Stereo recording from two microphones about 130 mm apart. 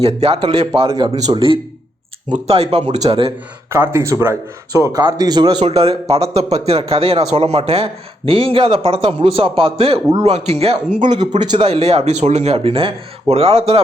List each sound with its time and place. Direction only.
0.0 s speech: 50° right (ahead or behind)
3.7 s speech: 20° right (ahead or behind)
5.6 s speech: 50° right (ahead or behind)
11.0 s speech: 35° right (ahead or behind)
11.7 s speech: 50° right (ahead or behind)